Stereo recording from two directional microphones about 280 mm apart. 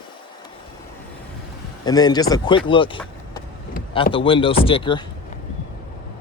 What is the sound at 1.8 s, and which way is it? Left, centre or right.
A man's voice, centre.